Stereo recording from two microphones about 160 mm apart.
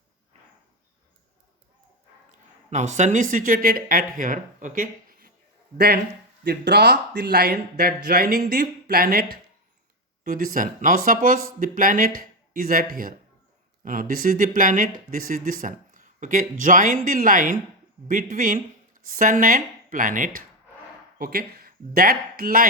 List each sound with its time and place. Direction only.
2.6 s speech: 45° right (ahead or behind)
5.7 s speech: 80° right; by 20.4 s 55° right (ahead or behind)
21.2 s speech: 65° right (ahead or behind)